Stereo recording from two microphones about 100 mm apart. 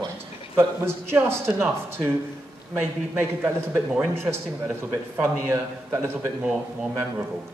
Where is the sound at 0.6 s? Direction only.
25° right (ahead or behind).